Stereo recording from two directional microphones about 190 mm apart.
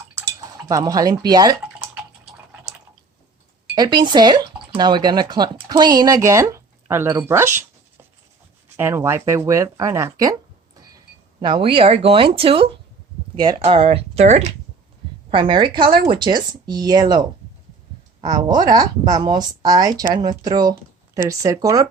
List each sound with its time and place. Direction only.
0.2 s speech: 20° right (ahead or behind)
3.8 s speech: 25° right (ahead or behind)
8.7 s speech: 15° right (ahead or behind)